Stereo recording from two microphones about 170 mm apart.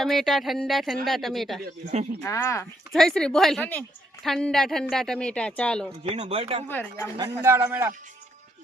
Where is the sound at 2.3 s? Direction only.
20° left (ahead or behind).